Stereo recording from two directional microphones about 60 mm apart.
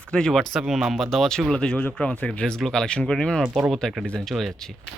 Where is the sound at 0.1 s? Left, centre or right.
Centre.